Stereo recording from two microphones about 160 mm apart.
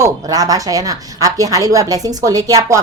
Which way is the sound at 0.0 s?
25° right (ahead or behind).